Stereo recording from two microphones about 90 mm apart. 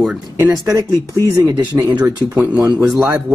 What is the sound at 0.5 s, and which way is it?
Speech, 40° right (ahead or behind).